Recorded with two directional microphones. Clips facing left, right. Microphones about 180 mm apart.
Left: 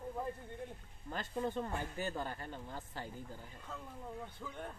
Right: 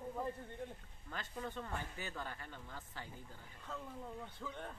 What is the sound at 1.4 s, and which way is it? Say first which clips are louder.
Speech: left 7 dB; 35° left (ahead or behind).